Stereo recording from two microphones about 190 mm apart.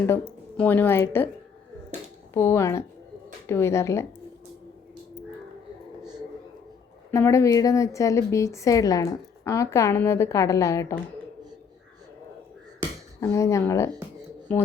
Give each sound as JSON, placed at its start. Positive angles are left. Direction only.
{"t": 0.1, "sound": "speech", "side_deg": 10}
{"t": 2.3, "sound": "speech", "side_deg": 15}
{"t": 7.1, "sound": "speech", "side_deg": 15}
{"t": 13.1, "sound": "speech", "side_deg": 15}